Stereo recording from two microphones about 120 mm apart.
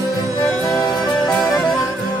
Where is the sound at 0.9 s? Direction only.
Centre (ahead or behind).